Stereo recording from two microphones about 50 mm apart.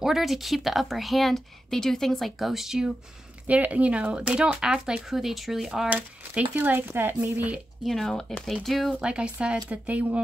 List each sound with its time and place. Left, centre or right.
0.0 s speech: centre
3.4 s speech: right; by 5.9 s centre
5.9 s a woman's voice: right
7.3 s speech: right
7.8 s speech: centre
9.0 s speech: centre